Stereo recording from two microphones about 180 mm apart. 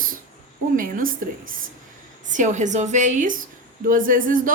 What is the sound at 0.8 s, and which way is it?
A woman's voice, 50° right (ahead or behind).